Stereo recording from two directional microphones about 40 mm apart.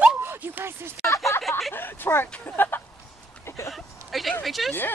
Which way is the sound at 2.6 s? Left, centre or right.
Left.